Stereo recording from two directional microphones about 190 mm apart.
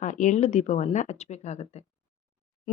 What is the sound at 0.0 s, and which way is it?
Speech, 40° left (ahead or behind).